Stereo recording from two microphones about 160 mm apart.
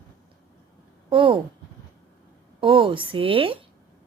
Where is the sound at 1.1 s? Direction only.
35° right (ahead or behind).